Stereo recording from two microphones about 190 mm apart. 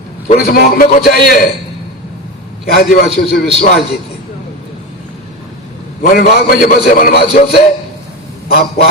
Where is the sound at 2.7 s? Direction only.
55° left (ahead or behind).